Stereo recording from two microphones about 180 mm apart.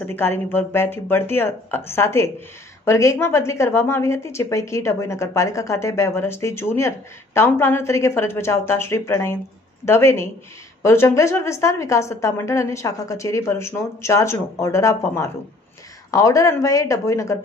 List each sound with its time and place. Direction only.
0.0 s a woman's voice: 10° left (ahead or behind)